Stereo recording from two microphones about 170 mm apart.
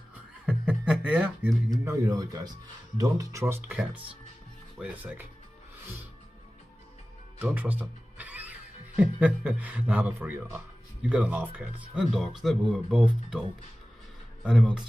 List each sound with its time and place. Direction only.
0.5 s music: 5° right (ahead or behind)
1.7 s speech: 20° right (ahead or behind)
7.5 s speech: 10° right (ahead or behind)
14.4 s speech: 5° right (ahead or behind)